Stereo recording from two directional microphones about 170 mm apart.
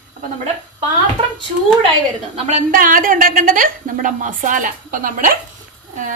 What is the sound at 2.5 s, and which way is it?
A woman's voice, 55° right (ahead or behind).